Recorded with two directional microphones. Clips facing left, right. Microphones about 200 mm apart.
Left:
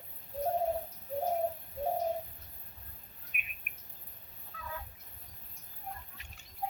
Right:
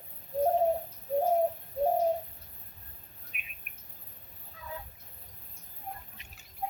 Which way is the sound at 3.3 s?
55° left (ahead or behind).